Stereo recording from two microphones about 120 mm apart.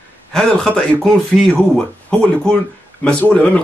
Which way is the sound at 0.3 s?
5° left (ahead or behind).